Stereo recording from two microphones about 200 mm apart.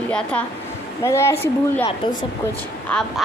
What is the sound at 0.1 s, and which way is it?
A woman's voice, 5° left (ahead or behind).